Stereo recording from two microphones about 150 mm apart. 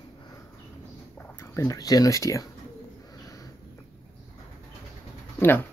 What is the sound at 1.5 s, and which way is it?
Speech, 20° left (ahead or behind).